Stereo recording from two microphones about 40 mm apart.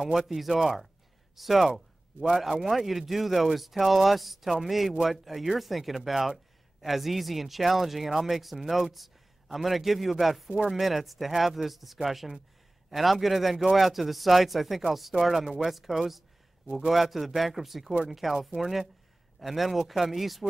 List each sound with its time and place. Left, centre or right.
0.3 s speech: centre
2.1 s speech: centre
2.7 s a man's voice: centre